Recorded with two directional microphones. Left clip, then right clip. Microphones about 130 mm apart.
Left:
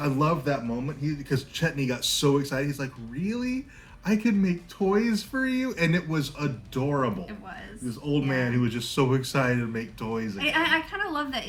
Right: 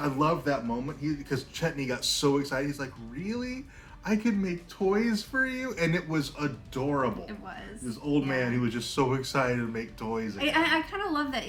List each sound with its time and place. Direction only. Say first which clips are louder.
0.0 s a man's voice: left 1 dB; 10° right (ahead or behind)
10.3 s a woman's voice: left 2 dB; 25° left (ahead or behind)